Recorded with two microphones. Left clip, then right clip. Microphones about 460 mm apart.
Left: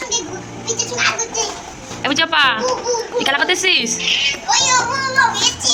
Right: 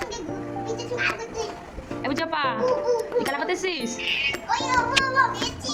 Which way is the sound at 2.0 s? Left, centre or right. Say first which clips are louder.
Left 11 dB; right.